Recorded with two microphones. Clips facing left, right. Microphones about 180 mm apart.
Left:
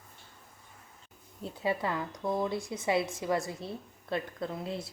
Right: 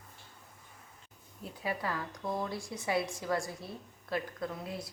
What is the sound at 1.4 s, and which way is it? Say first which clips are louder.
Speech: left 5 dB; 25° left (ahead or behind).